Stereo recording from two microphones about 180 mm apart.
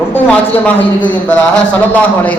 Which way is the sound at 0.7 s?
10° left (ahead or behind).